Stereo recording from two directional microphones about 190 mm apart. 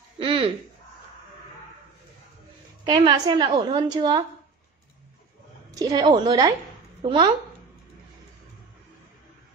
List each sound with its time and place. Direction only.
0.2 s a sound: 30° right (ahead or behind)
2.8 s a woman's voice: 25° right (ahead or behind)
5.8 s a woman's voice: 20° right (ahead or behind)